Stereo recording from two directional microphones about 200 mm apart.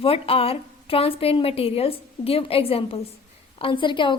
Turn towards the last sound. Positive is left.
turn(degrees=25)  # may be behind; listen again after turning